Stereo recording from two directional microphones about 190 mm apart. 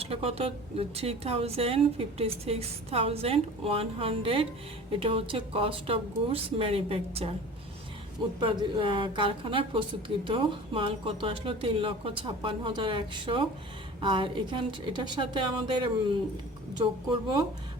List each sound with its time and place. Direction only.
0.0 s speech: 30° right (ahead or behind)
8.4 s speech: 25° right (ahead or behind)